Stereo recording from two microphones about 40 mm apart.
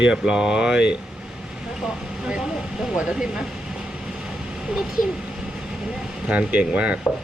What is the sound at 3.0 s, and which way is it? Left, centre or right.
Speech, right.